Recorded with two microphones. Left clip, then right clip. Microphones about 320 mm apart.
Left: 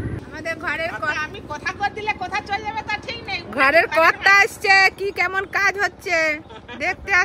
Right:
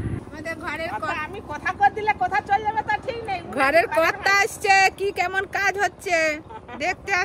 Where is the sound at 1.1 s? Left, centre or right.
Right.